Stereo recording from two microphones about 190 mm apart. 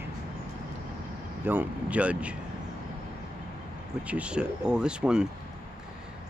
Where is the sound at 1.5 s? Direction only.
10° right (ahead or behind).